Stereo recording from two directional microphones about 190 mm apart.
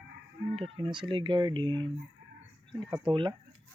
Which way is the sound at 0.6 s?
30° right (ahead or behind).